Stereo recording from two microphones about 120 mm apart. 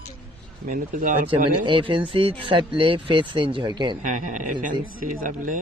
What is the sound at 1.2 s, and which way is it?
Speech, 45° right (ahead or behind).